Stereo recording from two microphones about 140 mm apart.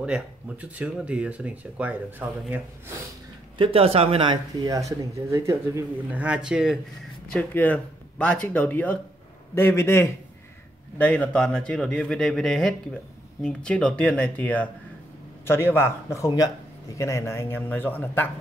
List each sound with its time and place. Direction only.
0.0 s speech: 10° right (ahead or behind)
3.5 s speech: 40° right (ahead or behind)
4.6 s speech: 25° right (ahead or behind)
6.2 s a man's voice: 5° right (ahead or behind)
7.3 s a man's voice: 10° left (ahead or behind)